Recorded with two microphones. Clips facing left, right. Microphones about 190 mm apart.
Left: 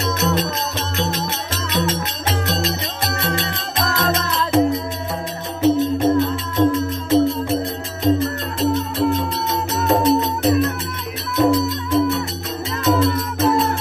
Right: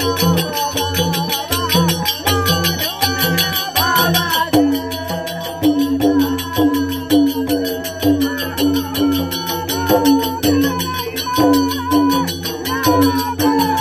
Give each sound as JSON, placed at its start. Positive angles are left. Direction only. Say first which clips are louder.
{"t": 0.0, "sound": "music", "louder": "right 4 dB", "side_deg": -70}